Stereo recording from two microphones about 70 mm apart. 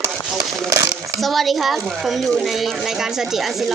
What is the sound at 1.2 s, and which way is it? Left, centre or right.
Speech, centre.